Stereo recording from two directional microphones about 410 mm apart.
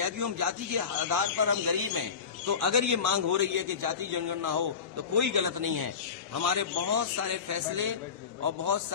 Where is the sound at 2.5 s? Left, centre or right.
Right.